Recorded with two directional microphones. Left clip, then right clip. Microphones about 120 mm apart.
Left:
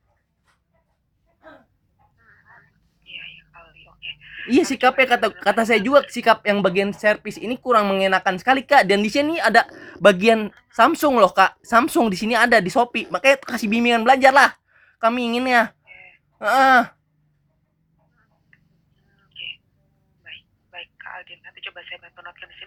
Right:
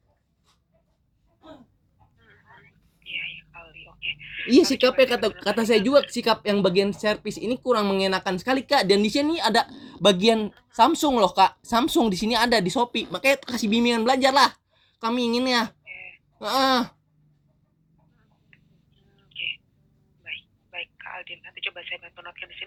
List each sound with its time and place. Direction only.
2.1 s telephone: 20° right (ahead or behind)
4.5 s speech: 45° left (ahead or behind)
15.9 s a sound: 25° right (ahead or behind)
16.4 s speech: 45° left (ahead or behind)
18.5 s tick-tock: 20° right (ahead or behind)
19.1 s a sound: 20° right (ahead or behind)
20.2 s telephone: 25° right (ahead or behind)